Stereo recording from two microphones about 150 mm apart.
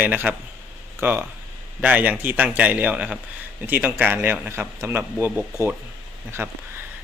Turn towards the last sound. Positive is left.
turn(degrees=-15)  # may be behind; listen again after turning